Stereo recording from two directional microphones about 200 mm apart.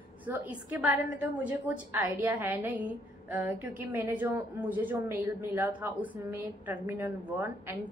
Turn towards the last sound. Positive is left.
turn(degrees=-10)  # may be behind; listen again after turning